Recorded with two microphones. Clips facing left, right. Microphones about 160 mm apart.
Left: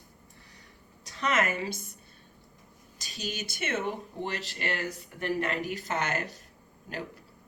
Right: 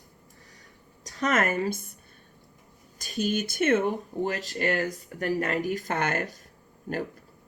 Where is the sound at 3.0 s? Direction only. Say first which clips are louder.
Right 10 dB; 50° right (ahead or behind).